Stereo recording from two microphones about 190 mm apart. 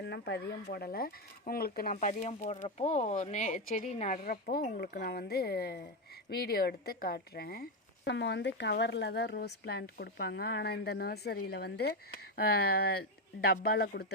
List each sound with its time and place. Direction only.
0.0 s speech: 60° left (ahead or behind)